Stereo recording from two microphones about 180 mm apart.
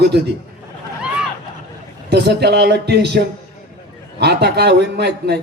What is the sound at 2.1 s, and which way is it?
A man's voice, 65° right (ahead or behind).